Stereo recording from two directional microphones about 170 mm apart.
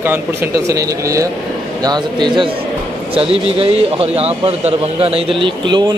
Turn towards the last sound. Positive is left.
turn(degrees=-25)  # may be behind; listen again after turning